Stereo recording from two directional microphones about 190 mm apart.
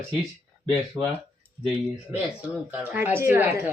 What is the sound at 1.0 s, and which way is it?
Speech, 20° right (ahead or behind).